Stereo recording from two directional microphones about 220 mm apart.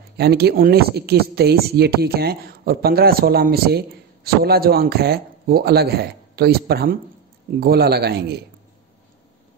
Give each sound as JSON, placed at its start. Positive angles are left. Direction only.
{"t": 0.2, "sound": "speech", "side_deg": -45}